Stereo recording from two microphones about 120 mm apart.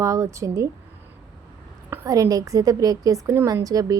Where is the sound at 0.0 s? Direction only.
25° right (ahead or behind).